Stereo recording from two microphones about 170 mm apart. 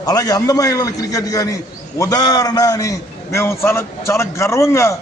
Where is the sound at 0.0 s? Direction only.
20° left (ahead or behind).